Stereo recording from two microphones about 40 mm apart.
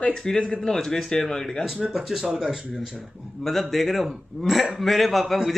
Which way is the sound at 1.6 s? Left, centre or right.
Centre.